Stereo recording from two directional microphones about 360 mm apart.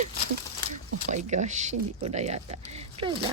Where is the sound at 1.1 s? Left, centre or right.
Centre.